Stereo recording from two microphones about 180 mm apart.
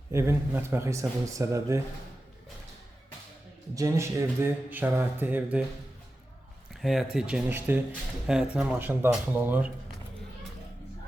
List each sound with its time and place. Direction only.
0.1 s speech: 15° right (ahead or behind)
3.8 s speech: 15° right (ahead or behind)
6.8 s speech: centre (ahead or behind)